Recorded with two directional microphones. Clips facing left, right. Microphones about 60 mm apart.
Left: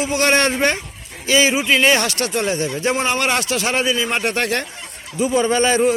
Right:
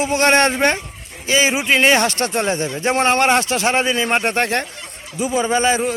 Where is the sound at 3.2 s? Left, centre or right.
Right.